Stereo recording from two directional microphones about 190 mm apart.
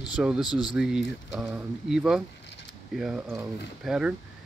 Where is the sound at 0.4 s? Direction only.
20° left (ahead or behind).